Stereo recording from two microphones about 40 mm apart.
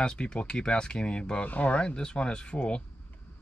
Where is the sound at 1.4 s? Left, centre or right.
Left.